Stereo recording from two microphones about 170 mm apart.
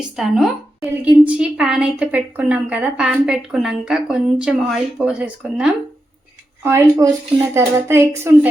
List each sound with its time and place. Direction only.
0.0 s a woman's voice: centre (ahead or behind)